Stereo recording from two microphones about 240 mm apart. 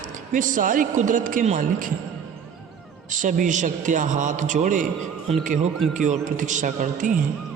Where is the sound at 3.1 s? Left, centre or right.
Right.